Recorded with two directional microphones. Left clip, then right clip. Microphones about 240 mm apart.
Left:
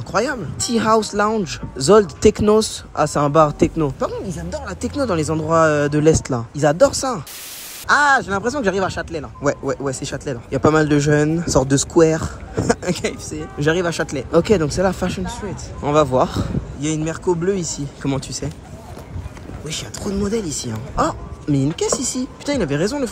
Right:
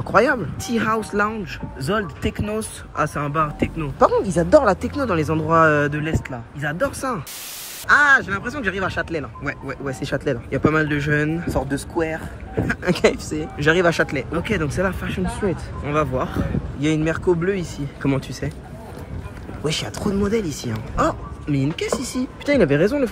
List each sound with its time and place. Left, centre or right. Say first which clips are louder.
0.1 s speech: right 4 dB; centre
1.4 s speech: left 6 dB; centre
4.0 s speech: right 8 dB; centre
4.8 s speech: left 1 dB; centre
12.8 s speech: right 5 dB; centre
14.3 s speech: left 7 dB; centre
19.6 s speech: right 4 dB; centre